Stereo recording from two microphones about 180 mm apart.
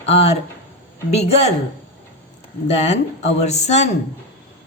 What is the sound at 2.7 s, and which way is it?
A woman's voice, 40° left (ahead or behind).